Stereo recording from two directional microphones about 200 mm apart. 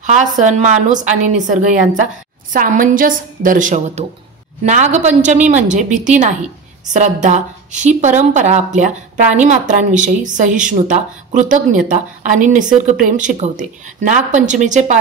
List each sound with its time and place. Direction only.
0.0 s a woman's voice: 40° right (ahead or behind)